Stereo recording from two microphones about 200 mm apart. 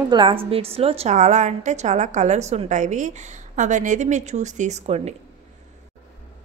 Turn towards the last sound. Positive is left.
turn(degrees=-35)  # may be behind; listen again after turning